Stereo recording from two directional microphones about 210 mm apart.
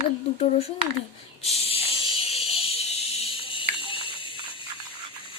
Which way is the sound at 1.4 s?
30° left (ahead or behind).